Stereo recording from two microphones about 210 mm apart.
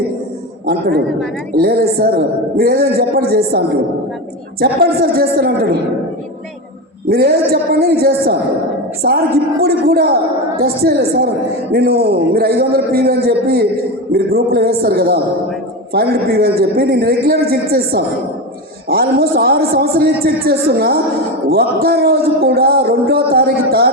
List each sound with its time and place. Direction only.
0.6 s a man's voice: 45° right (ahead or behind)
4.6 s a man's voice: 45° right (ahead or behind)
7.1 s a man's voice: 45° right (ahead or behind)